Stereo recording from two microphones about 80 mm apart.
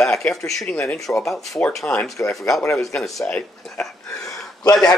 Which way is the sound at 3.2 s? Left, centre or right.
Centre.